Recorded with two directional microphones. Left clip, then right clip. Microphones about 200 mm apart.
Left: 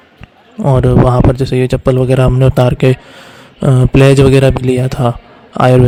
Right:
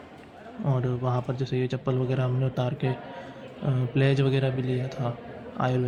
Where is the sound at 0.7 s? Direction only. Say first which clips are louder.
Left 19 dB; 55° left (ahead or behind).